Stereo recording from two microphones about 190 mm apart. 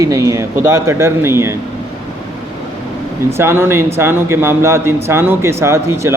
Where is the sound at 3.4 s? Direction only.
15° right (ahead or behind).